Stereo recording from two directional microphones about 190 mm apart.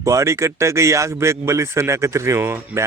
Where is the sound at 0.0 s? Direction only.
15° right (ahead or behind).